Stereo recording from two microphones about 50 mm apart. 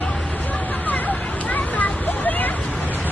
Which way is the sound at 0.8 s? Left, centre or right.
Left.